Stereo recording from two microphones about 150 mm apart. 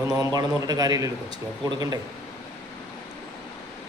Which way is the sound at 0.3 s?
25° right (ahead or behind).